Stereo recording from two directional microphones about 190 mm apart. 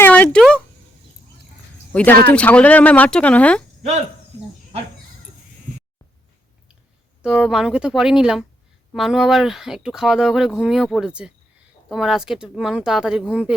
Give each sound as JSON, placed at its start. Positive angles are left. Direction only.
{"t": 0.0, "sound": "a sound", "side_deg": 5}
{"t": 1.9, "sound": "speech", "side_deg": 10}
{"t": 7.2, "sound": "speech", "side_deg": -5}